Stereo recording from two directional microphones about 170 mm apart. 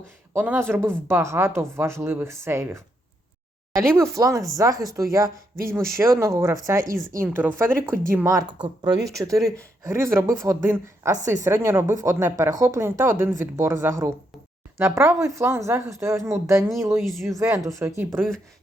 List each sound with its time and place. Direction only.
0.3 s speech: 15° right (ahead or behind)
17.0 s speech: centre (ahead or behind)
17.2 s speech: 15° right (ahead or behind)